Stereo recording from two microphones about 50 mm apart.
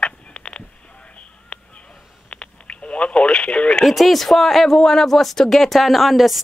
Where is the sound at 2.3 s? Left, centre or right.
Left.